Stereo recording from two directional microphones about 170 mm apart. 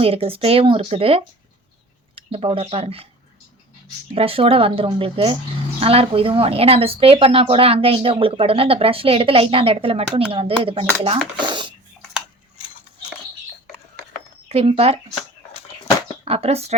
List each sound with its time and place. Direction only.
0.0 s speech: 35° right (ahead or behind)
4.1 s a child's voice: 35° right (ahead or behind)
14.5 s speech: 35° right (ahead or behind)
16.2 s speech: 35° right (ahead or behind)